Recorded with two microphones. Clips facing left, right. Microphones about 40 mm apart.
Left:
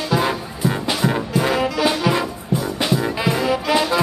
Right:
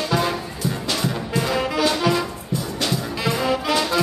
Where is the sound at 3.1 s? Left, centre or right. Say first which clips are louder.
Left 3 dB; centre.